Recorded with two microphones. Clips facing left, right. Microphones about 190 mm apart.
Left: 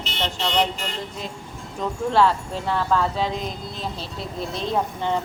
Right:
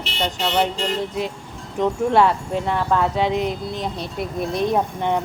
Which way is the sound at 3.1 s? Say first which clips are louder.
Right 5 dB; 70° right (ahead or behind).